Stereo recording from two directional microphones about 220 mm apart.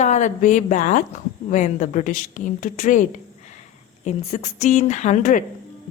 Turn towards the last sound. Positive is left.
turn(degrees=35)  # may be behind; listen again after turning